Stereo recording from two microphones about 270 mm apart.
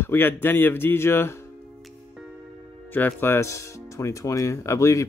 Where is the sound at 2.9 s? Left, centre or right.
Centre.